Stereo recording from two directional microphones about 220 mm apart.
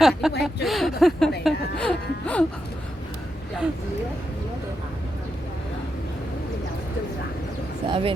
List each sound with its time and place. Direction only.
0.0 s speech: centre (ahead or behind)
1.5 s a sound: 5° left (ahead or behind)
7.9 s speech: 25° right (ahead or behind)